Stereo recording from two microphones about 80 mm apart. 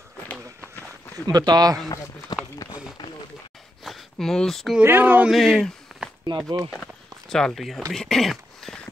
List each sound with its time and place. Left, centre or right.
1.2 s speech: right
2.3 s run: left
3.8 s a sound: centre
4.8 s speech: right
5.3 s speech: centre
5.9 s a sound: centre
6.2 s speech: right
6.7 s walk: centre
7.9 s a sound: centre